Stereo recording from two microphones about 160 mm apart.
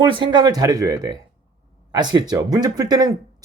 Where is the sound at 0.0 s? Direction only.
30° right (ahead or behind).